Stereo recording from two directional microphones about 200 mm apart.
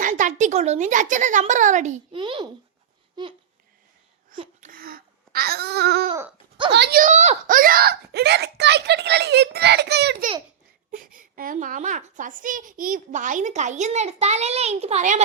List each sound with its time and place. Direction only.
0.0 s a woman's voice: 40° right (ahead or behind)
2.1 s a child's voice: 25° right (ahead or behind)
4.6 s babbling: 45° right (ahead or behind)
6.7 s speech: 55° right (ahead or behind)
10.9 s a woman's voice: 45° right (ahead or behind)